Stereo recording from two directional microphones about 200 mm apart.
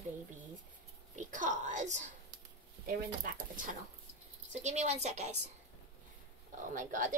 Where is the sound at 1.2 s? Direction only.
40° right (ahead or behind).